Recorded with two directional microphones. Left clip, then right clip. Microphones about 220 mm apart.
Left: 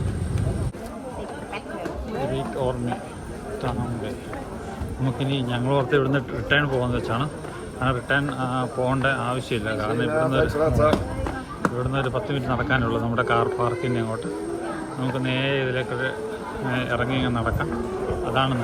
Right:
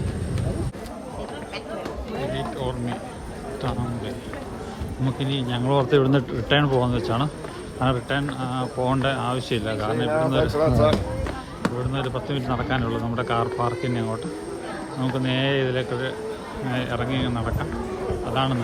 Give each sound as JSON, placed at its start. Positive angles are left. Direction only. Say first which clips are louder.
{"t": 2.3, "sound": "speech", "louder": "left 2 dB", "side_deg": -5}
{"t": 5.0, "sound": "speech", "louder": "left 1 dB", "side_deg": -5}
{"t": 10.6, "sound": "speech", "louder": "right 1 dB", "side_deg": -35}
{"t": 11.6, "sound": "speech", "louder": "left 2 dB", "side_deg": -5}